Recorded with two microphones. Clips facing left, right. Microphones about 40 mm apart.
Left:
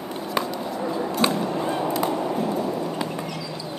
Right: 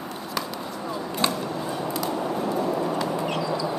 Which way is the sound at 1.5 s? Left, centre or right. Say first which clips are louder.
Left 4 dB; left.